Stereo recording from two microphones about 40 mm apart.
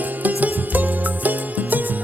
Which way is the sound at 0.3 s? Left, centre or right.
Right.